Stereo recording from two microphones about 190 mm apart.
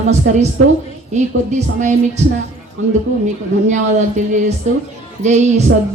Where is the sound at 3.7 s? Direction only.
40° right (ahead or behind).